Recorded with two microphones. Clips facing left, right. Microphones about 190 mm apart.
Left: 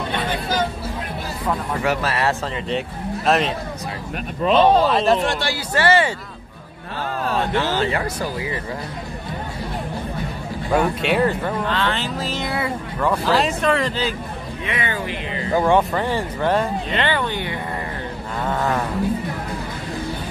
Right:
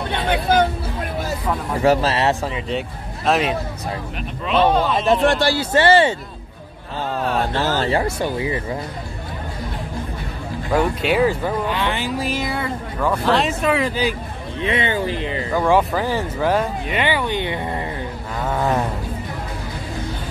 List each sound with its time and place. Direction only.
0.3 s hubbub: 60° right (ahead or behind)
1.8 s speech: 30° right (ahead or behind)
2.4 s speech: 5° right (ahead or behind)
4.5 s speech: 35° left (ahead or behind)
5.4 s speech: 30° right (ahead or behind)
7.5 s speech: 35° right (ahead or behind)
10.7 s speech: centre (ahead or behind)
12.4 s speech: centre (ahead or behind)
14.6 s speech: 25° right (ahead or behind)
15.6 s speech: centre (ahead or behind)